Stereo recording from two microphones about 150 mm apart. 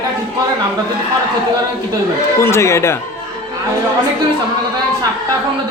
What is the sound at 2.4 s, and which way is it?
Speech, 20° left (ahead or behind).